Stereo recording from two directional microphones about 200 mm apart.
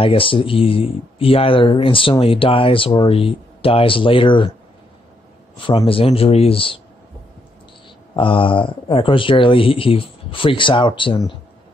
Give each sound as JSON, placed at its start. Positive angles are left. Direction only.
{"t": 0.0, "sound": "speech", "side_deg": 25}
{"t": 5.7, "sound": "speech", "side_deg": 25}
{"t": 8.2, "sound": "speech", "side_deg": 25}